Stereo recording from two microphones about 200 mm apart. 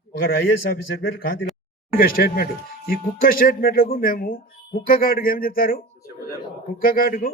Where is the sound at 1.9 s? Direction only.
45° left (ahead or behind).